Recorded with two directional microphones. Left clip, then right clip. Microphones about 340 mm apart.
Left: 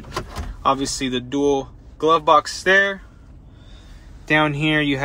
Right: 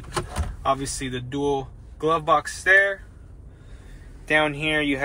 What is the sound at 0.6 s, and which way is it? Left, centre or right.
Speech, centre.